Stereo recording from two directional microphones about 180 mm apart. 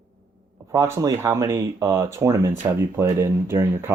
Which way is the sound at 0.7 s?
15° right (ahead or behind).